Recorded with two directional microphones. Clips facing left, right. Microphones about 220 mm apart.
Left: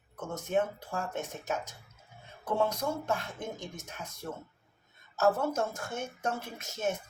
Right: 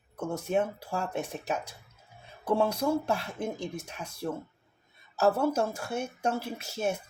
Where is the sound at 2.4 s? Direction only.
30° right (ahead or behind).